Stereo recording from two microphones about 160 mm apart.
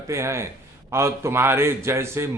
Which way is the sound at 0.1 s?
15° right (ahead or behind).